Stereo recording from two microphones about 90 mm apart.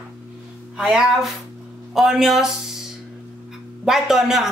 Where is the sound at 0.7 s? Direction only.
5° right (ahead or behind).